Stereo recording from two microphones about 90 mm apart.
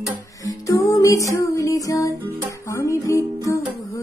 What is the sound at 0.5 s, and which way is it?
Music, 40° left (ahead or behind).